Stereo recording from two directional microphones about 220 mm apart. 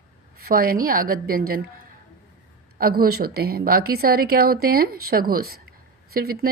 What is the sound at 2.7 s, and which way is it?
A woman's voice, 40° right (ahead or behind).